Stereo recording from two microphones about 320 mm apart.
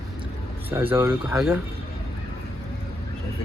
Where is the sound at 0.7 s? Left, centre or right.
Centre.